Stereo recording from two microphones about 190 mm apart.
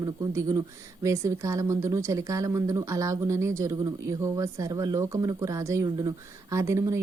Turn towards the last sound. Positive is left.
turn(degrees=-15)  # may be behind; listen again after turning